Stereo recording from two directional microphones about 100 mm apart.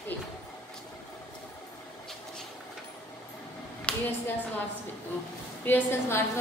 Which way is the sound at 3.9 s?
10° left (ahead or behind).